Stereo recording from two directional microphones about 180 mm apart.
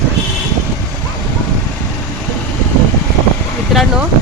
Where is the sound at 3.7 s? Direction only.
5° right (ahead or behind).